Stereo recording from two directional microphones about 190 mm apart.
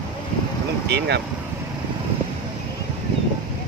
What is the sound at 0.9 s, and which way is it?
Speech, 60° right (ahead or behind).